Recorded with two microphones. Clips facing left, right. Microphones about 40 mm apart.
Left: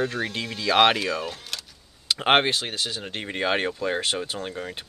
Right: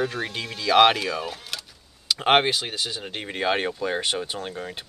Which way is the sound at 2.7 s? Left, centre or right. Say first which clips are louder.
Even; centre.